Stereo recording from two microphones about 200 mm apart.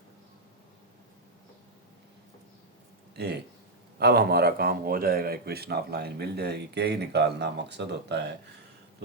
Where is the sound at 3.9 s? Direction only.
50° right (ahead or behind).